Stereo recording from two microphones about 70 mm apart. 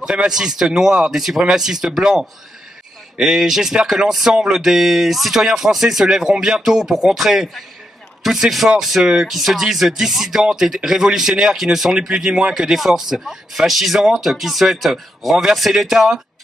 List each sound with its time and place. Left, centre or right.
0.0 s a man's voice: centre